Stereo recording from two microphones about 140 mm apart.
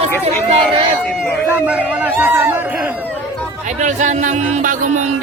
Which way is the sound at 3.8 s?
60° right (ahead or behind).